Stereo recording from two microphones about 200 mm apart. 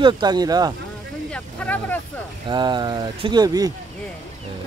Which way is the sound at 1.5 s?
10° left (ahead or behind).